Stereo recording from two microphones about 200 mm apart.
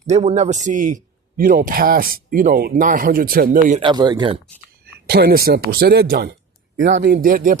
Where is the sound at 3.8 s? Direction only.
20° right (ahead or behind).